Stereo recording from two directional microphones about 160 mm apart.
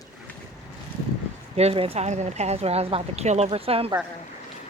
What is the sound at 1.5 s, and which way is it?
Speech, 40° right (ahead or behind).